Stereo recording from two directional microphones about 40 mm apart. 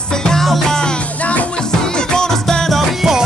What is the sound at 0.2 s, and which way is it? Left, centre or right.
Music, centre.